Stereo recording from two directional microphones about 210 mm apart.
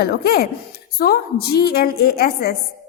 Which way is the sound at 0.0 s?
50° left (ahead or behind).